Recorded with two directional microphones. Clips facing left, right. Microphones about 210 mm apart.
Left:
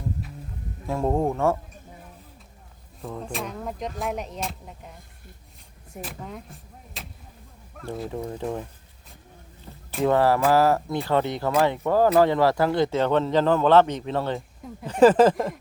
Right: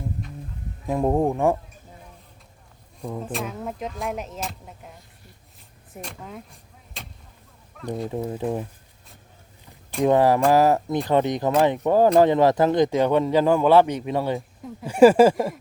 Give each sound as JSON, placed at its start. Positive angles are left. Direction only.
{"t": 0.9, "sound": "speech", "side_deg": -15}
{"t": 3.1, "sound": "speech", "side_deg": -5}
{"t": 5.9, "sound": "vehicle", "side_deg": 0}
{"t": 8.3, "sound": "speech", "side_deg": -15}
{"t": 10.0, "sound": "speech", "side_deg": -15}